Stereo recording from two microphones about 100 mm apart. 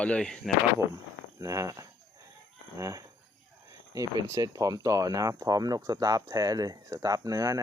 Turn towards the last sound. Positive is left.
turn(degrees=-35)  # may be behind; listen again after turning